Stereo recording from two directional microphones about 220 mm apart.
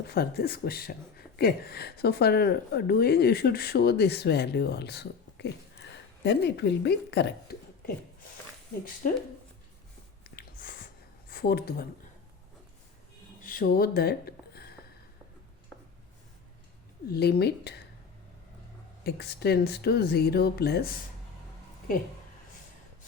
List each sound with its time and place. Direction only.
0.1 s speech: 45° left (ahead or behind)
10.2 s a sound: 40° left (ahead or behind)
11.3 s speech: 45° left (ahead or behind)
13.4 s a sound: 40° left (ahead or behind)
17.1 s speech: 45° left (ahead or behind)
19.0 s speech: 45° left (ahead or behind)